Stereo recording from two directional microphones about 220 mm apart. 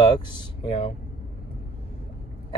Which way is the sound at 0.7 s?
25° left (ahead or behind).